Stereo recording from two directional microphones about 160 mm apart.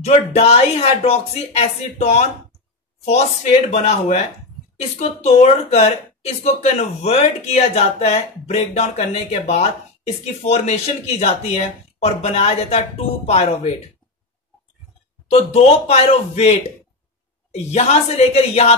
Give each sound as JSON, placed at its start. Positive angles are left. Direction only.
{"t": 0.0, "sound": "speech", "side_deg": 40}
{"t": 3.7, "sound": "speech", "side_deg": 40}
{"t": 15.2, "sound": "speech", "side_deg": 40}